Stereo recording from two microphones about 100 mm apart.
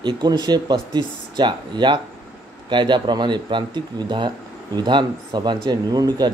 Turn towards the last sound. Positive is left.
turn(degrees=-40)  # may be behind; listen again after turning